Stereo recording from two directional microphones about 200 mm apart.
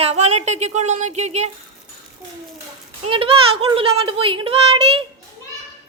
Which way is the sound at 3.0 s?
25° right (ahead or behind).